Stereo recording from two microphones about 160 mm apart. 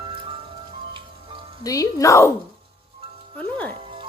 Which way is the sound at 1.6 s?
20° left (ahead or behind).